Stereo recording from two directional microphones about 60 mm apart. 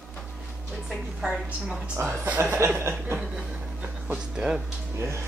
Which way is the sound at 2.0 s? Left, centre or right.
Right.